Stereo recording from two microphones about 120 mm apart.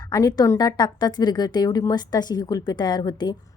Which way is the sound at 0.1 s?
35° left (ahead or behind).